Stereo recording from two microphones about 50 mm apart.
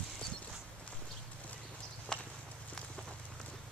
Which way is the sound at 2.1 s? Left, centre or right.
Centre.